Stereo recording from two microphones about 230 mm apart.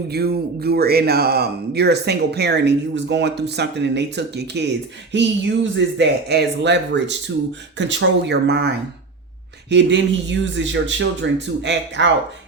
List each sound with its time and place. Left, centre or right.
0.1 s speech: right